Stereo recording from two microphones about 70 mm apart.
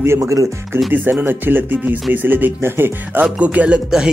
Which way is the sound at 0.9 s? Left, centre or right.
Right.